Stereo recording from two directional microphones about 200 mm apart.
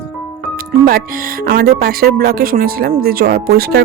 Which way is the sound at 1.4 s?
50° right (ahead or behind).